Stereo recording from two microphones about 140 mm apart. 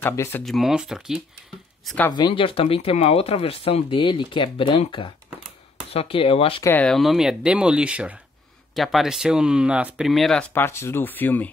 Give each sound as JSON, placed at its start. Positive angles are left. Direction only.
{"t": 0.0, "sound": "speech", "side_deg": 20}
{"t": 0.4, "sound": "speech", "side_deg": 0}
{"t": 2.0, "sound": "speech", "side_deg": 30}
{"t": 6.6, "sound": "speech", "side_deg": 15}
{"t": 6.9, "sound": "speech", "side_deg": 0}
{"t": 10.5, "sound": "speech", "side_deg": 15}